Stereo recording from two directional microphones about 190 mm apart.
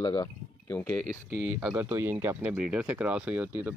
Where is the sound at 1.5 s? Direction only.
5° right (ahead or behind).